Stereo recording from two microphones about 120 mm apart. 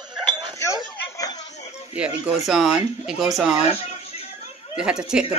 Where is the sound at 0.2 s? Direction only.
40° right (ahead or behind).